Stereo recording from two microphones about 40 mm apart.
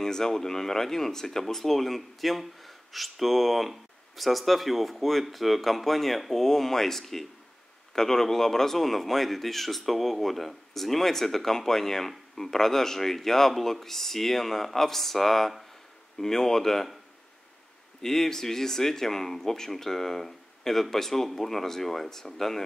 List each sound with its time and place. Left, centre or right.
0.0 s speech: centre
18.0 s speech: centre